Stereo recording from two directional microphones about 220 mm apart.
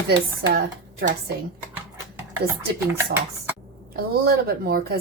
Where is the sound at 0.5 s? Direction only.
40° right (ahead or behind).